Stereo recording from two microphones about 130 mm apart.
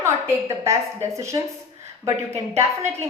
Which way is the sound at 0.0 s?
20° right (ahead or behind).